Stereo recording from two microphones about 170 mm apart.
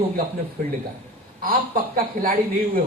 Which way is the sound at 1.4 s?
55° right (ahead or behind).